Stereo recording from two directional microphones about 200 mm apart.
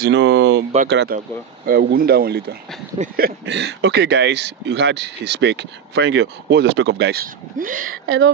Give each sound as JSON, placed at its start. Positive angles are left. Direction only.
{"t": 0.0, "sound": "speech", "side_deg": -60}